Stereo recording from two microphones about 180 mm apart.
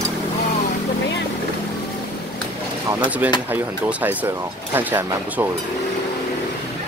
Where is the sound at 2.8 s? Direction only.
10° right (ahead or behind).